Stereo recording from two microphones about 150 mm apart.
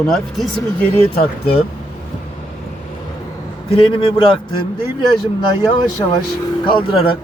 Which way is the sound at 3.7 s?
35° left (ahead or behind).